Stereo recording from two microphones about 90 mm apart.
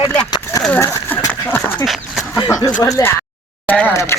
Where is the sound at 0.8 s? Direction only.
20° left (ahead or behind).